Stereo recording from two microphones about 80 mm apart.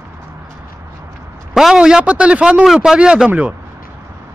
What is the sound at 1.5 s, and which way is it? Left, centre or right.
A man's voice, centre.